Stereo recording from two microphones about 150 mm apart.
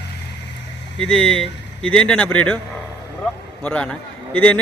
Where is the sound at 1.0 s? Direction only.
5° left (ahead or behind).